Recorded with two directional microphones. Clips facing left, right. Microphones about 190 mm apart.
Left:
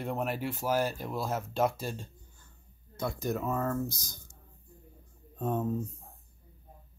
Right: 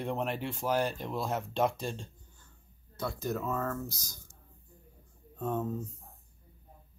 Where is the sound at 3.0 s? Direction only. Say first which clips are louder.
Left 2 dB; 15° left (ahead or behind).